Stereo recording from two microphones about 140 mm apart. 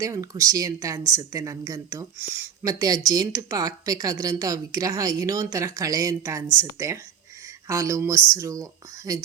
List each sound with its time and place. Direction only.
0.0 s a woman's voice: 25° right (ahead or behind)
2.1 s speech: 15° right (ahead or behind)
2.6 s a woman's voice: 25° right (ahead or behind)